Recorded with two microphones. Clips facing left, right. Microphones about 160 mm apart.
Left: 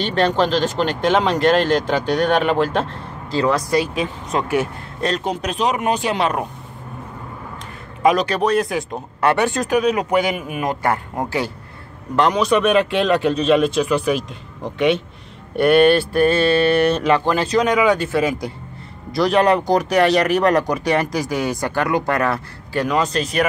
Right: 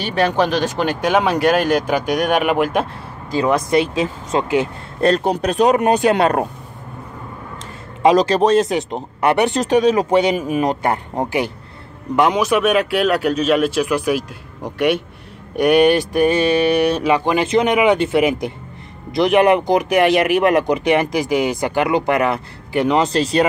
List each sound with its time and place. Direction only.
0.0 s speech: 10° right (ahead or behind)
5.2 s speech: 40° right (ahead or behind)
5.8 s speech: 55° right (ahead or behind)
8.0 s speech: 30° right (ahead or behind)
12.2 s speech: 10° right (ahead or behind); by 23.4 s 30° right (ahead or behind)